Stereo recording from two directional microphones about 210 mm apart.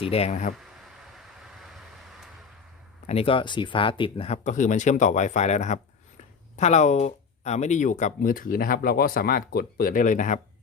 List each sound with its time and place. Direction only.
0.0 s speech: 30° left (ahead or behind)
1.1 s vehicle: centre (ahead or behind)
3.1 s speech: 25° left (ahead or behind)